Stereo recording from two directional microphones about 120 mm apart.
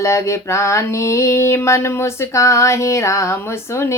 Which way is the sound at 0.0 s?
25° left (ahead or behind).